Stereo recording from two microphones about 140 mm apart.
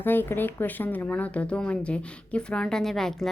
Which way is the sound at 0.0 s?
15° left (ahead or behind).